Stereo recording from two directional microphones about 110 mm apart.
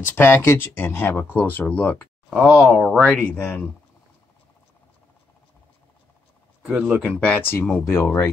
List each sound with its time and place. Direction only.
0.1 s speech: 20° left (ahead or behind)
2.2 s speech: 15° right (ahead or behind)
3.0 s speech: 10° left (ahead or behind)
6.6 s speech: 5° right (ahead or behind)
7.0 s speech: 10° left (ahead or behind); by 8.3 s 25° left (ahead or behind)